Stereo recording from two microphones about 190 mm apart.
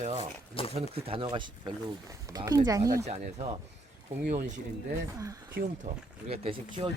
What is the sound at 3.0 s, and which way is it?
Speech, 35° right (ahead or behind).